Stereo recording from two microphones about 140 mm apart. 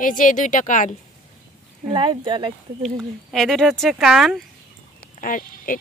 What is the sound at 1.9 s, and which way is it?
Speech, 35° right (ahead or behind).